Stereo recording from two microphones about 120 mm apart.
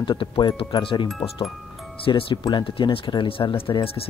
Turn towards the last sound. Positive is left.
turn(degrees=50)  # may be behind; listen again after turning